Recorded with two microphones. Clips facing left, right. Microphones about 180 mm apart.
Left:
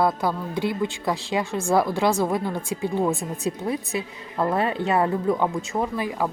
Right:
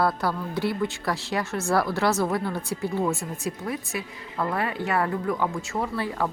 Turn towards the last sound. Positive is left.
turn(degrees=15)  # may be behind; listen again after turning